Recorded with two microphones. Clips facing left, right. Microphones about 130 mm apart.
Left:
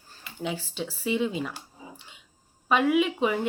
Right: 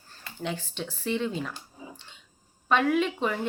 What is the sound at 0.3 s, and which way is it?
Speech, 5° left (ahead or behind).